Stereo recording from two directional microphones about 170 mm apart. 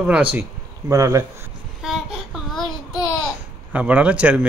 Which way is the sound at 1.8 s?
Centre (ahead or behind).